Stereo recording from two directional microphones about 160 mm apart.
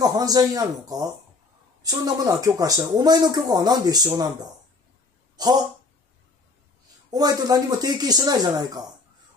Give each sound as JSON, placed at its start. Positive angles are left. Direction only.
{"t": 0.0, "sound": "speech", "side_deg": -25}
{"t": 5.4, "sound": "speech", "side_deg": -25}
{"t": 7.1, "sound": "speech", "side_deg": -25}